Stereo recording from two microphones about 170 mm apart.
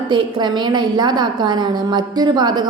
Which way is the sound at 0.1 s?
25° right (ahead or behind).